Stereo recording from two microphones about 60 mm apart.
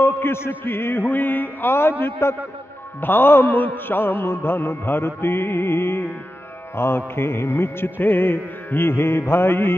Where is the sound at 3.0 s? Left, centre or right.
Left.